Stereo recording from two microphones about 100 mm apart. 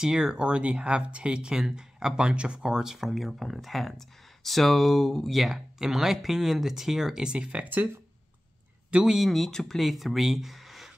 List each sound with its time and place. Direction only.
0.0 s speech: 5° right (ahead or behind)
8.9 s speech: 5° right (ahead or behind)